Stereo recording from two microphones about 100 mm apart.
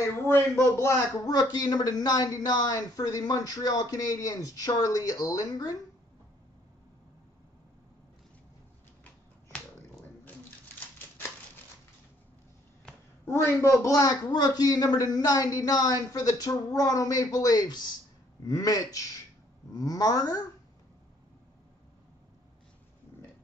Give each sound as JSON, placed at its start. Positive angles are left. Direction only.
{"t": 0.0, "sound": "speech", "side_deg": 25}
{"t": 1.2, "sound": "speech", "side_deg": 40}
{"t": 13.3, "sound": "speech", "side_deg": 30}